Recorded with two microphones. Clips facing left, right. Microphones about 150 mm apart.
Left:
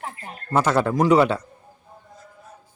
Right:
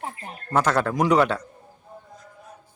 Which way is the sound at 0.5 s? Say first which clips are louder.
Left 2 dB; 10° left (ahead or behind).